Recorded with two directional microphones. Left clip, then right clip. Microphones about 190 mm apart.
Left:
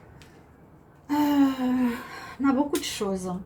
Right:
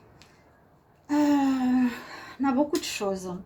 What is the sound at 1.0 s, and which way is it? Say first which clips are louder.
Gasp: left 1 dB; 45° right (ahead or behind).